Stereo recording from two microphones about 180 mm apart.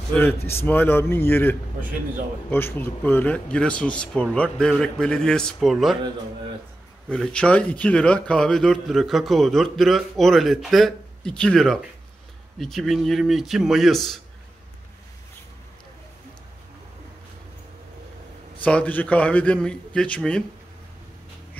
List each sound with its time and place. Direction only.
0.1 s a man's voice: 10° left (ahead or behind)
7.1 s a man's voice: 5° left (ahead or behind)
18.6 s a man's voice: 5° left (ahead or behind)